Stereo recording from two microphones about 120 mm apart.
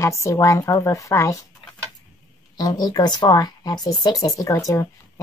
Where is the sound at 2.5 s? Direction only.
35° left (ahead or behind).